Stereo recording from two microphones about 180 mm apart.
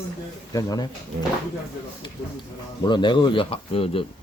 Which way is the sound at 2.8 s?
25° left (ahead or behind).